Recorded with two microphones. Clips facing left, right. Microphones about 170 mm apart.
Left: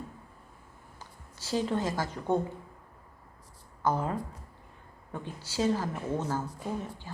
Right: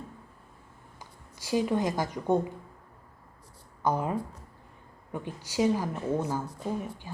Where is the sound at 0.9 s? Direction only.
15° right (ahead or behind).